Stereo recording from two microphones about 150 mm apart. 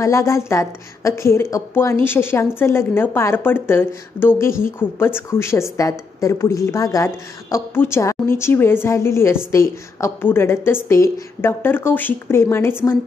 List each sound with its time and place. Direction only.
0.0 s a woman's voice: 20° left (ahead or behind)